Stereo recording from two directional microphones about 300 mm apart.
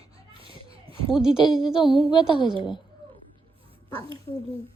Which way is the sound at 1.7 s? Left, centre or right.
Centre.